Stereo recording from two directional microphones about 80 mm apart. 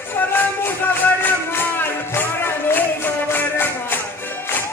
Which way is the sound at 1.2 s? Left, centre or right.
Left.